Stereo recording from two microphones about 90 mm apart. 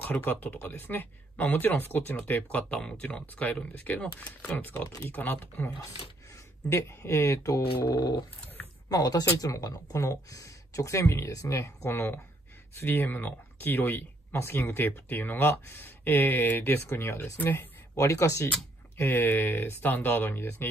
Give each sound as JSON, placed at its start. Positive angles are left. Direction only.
{"t": 0.0, "sound": "speech", "side_deg": 20}
{"t": 6.7, "sound": "speech", "side_deg": 30}
{"t": 7.8, "sound": "dog", "side_deg": 50}
{"t": 8.8, "sound": "speech", "side_deg": 45}
{"t": 17.9, "sound": "speech", "side_deg": 35}